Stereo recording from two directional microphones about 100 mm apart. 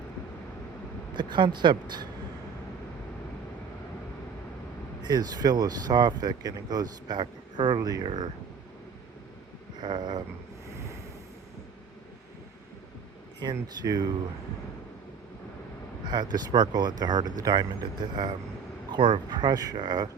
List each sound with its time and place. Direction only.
1.1 s speech: 50° right (ahead or behind)
5.0 s speech: 40° right (ahead or behind)
9.8 s speech: 45° right (ahead or behind)
13.4 s speech: 40° right (ahead or behind)
16.0 s speech: 45° right (ahead or behind)